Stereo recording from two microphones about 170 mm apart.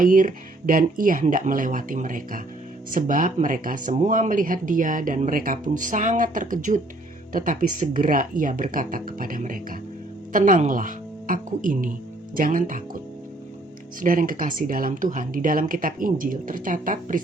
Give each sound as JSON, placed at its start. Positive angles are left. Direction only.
{"t": 0.0, "sound": "speech", "side_deg": -50}
{"t": 14.0, "sound": "speech", "side_deg": -55}